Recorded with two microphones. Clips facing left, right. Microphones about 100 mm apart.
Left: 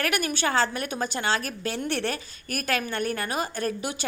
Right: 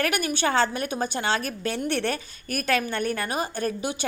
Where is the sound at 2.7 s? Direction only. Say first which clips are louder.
Right 2 dB; 25° right (ahead or behind).